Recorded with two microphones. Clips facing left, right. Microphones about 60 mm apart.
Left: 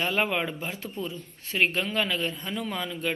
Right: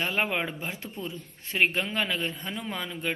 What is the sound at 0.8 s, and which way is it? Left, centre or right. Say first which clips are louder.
Speech: left 2 dB; right.